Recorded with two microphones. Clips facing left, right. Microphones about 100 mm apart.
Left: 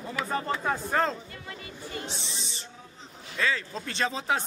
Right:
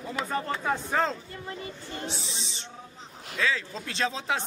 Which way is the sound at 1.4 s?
30° right (ahead or behind).